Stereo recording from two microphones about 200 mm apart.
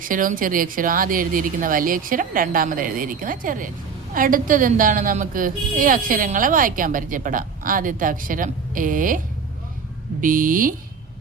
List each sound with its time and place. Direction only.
0.0 s a woman's voice: 45° right (ahead or behind)